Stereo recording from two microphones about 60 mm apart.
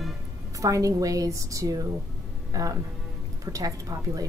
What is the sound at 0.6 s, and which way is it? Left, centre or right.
A woman's voice, right.